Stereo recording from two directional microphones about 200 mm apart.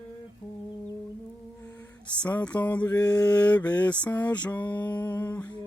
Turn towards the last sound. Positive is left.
turn(degrees=10)  # may be behind; listen again after turning